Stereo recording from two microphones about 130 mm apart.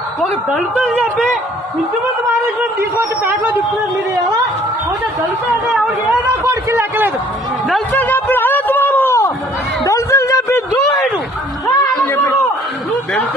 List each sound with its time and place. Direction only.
6.4 s a man's voice: 20° right (ahead or behind)
7.9 s a sound: 15° left (ahead or behind)
11.6 s music: 15° left (ahead or behind)